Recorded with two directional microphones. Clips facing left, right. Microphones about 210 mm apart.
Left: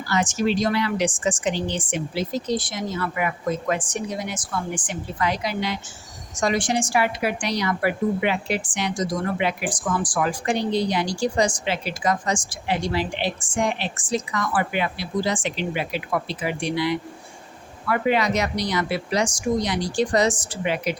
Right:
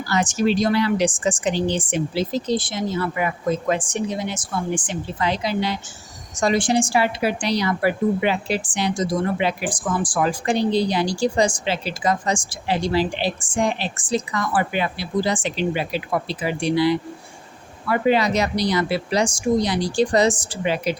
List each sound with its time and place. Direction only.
0.1 s a woman's voice: 35° right (ahead or behind)